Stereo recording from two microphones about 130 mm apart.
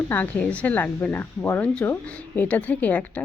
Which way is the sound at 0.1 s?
10° left (ahead or behind).